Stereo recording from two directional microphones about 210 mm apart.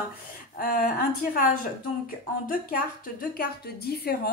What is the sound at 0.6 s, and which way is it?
Speech, 40° left (ahead or behind).